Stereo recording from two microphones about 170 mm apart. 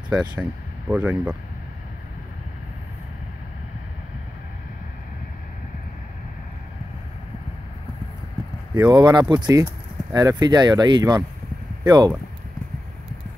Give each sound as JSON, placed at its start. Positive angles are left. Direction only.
{"t": 0.2, "sound": "speech", "side_deg": -10}
{"t": 8.7, "sound": "speech", "side_deg": -25}